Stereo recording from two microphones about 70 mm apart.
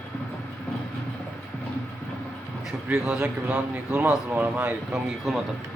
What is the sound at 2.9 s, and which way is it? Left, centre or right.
Speech, centre.